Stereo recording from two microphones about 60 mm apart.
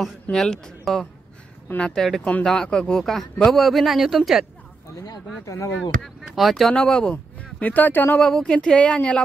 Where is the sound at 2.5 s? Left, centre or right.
Centre.